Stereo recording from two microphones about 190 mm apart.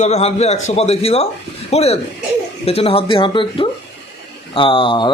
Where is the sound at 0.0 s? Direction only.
35° left (ahead or behind).